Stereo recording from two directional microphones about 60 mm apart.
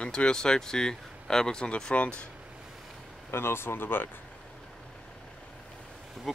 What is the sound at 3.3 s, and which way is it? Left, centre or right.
Speech, left.